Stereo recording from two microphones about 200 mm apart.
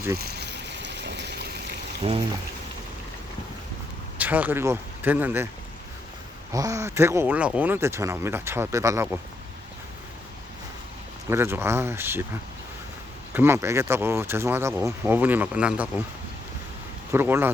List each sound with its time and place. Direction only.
0.2 s a sound: 55° right (ahead or behind)
2.0 s speech: 30° right (ahead or behind)
4.2 s speech: 10° right (ahead or behind)
6.5 s speech: 15° right (ahead or behind)
11.3 s speech: 10° right (ahead or behind)
13.3 s speech: 10° right (ahead or behind)
17.1 s speech: 10° right (ahead or behind)